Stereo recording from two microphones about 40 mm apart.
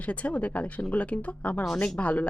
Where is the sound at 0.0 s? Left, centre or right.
Left.